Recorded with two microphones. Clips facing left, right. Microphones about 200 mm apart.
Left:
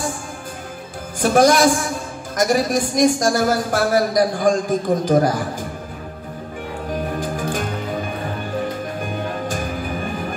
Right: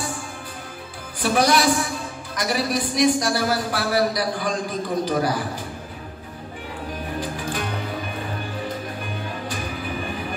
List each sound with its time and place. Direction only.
1.2 s a man's voice: 45° left (ahead or behind)
7.2 s music: 45° left (ahead or behind)
9.0 s music: 45° left (ahead or behind)